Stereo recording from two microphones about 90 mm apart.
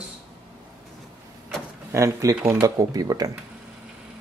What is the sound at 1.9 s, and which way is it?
Speech, 35° right (ahead or behind).